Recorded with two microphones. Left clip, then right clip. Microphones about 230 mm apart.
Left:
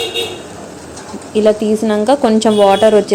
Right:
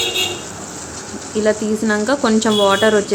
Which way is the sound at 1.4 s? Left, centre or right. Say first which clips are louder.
Left 5 dB; centre.